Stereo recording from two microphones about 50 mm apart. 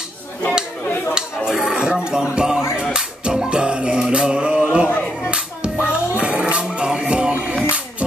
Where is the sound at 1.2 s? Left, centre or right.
Centre.